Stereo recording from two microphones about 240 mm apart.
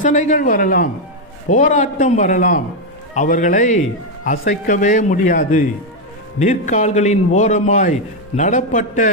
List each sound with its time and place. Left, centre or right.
0.0 s a man's voice: left